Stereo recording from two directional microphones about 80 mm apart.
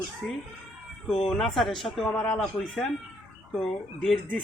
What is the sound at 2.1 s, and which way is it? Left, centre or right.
Speech, centre.